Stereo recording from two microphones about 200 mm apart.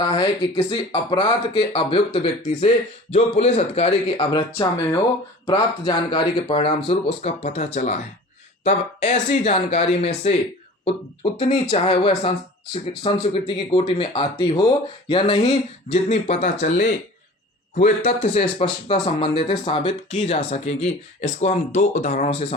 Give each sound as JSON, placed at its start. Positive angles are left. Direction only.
{"t": 0.0, "sound": "speech", "side_deg": 25}
{"t": 18.4, "sound": "speech", "side_deg": 25}